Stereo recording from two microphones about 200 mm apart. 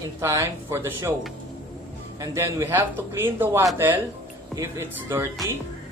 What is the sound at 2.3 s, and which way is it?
Speech, 10° right (ahead or behind).